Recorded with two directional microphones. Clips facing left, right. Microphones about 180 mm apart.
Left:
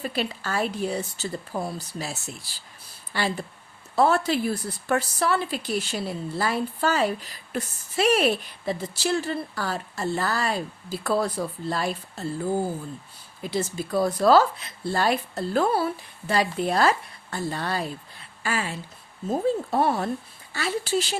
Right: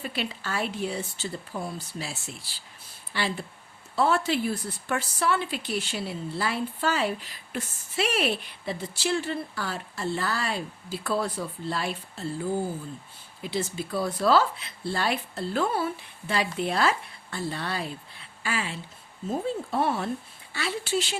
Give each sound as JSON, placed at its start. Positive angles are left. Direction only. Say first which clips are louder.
{"t": 0.0, "sound": "a woman's voice", "louder": "left 4 dB", "side_deg": 40}